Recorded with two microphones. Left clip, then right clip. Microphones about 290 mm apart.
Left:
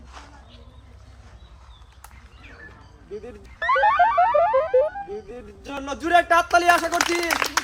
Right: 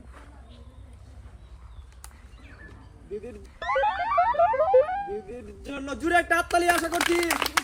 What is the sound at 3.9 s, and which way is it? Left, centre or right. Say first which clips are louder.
Music: left 5 dB; centre.